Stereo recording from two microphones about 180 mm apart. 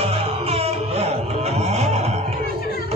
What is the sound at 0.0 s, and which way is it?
Music, 35° right (ahead or behind).